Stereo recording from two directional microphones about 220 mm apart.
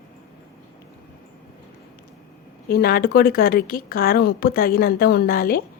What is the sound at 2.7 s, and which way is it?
A woman's voice, 45° left (ahead or behind).